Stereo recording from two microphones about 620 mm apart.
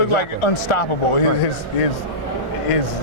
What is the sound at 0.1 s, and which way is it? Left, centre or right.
Speech, left.